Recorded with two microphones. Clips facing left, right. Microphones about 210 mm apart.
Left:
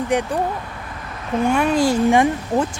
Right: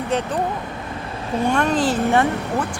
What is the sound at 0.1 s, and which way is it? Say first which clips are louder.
Speech: left 2 dB; 15° left (ahead or behind).